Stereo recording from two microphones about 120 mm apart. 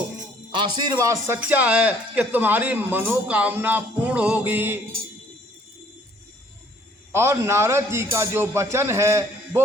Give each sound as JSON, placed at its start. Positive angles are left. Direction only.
{"t": 0.5, "sound": "a man's voice", "side_deg": -40}
{"t": 0.9, "sound": "speech", "side_deg": -25}
{"t": 1.4, "sound": "speech", "side_deg": -15}
{"t": 7.1, "sound": "speech", "side_deg": -20}